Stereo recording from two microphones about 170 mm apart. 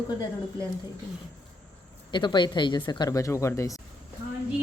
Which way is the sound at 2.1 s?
25° left (ahead or behind).